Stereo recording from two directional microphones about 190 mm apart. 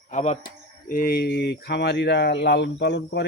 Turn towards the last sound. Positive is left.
turn(degrees=65)  # may be behind; listen again after turning